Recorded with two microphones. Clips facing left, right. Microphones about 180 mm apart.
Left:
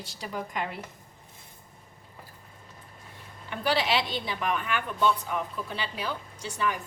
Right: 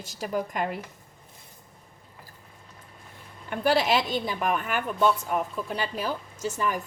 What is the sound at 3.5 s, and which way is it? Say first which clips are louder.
A woman's voice: right 4 dB; 50° right (ahead or behind).